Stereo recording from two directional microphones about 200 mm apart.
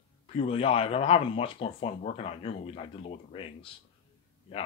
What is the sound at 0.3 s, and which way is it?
Speech, 30° left (ahead or behind).